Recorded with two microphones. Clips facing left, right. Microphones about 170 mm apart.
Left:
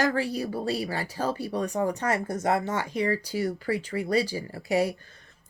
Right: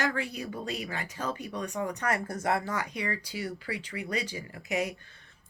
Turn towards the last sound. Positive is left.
turn(degrees=35)  # may be behind; listen again after turning